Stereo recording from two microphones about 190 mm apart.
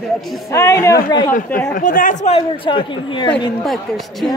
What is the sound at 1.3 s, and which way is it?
Speech, 45° left (ahead or behind).